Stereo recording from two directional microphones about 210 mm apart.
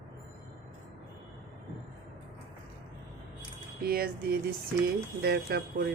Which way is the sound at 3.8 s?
45° right (ahead or behind).